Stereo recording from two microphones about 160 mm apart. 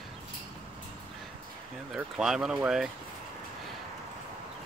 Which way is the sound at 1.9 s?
5° right (ahead or behind).